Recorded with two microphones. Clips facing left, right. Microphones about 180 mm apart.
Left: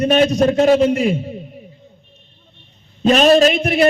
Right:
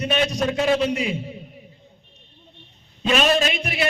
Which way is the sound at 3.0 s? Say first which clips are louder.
Left 8 dB; 40° left (ahead or behind).